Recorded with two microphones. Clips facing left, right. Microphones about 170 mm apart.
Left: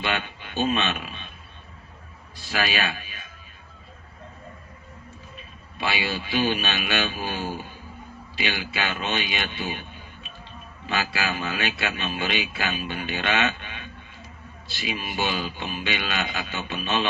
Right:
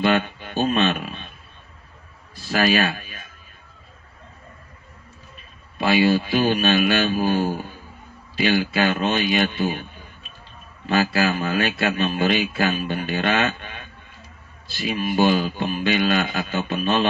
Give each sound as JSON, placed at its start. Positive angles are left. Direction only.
{"t": 0.0, "sound": "speech", "side_deg": -45}
{"t": 2.5, "sound": "a man's voice", "side_deg": -45}
{"t": 5.8, "sound": "a man's voice", "side_deg": -45}
{"t": 10.9, "sound": "a man's voice", "side_deg": -45}